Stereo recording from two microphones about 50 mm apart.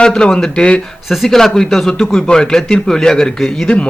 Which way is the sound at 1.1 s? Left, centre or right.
Centre.